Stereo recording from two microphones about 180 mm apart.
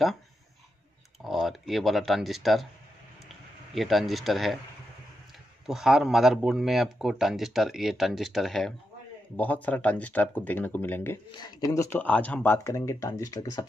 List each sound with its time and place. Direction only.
1.2 s speech: centre (ahead or behind)
5.7 s speech: 5° right (ahead or behind)
11.3 s speech: 20° left (ahead or behind)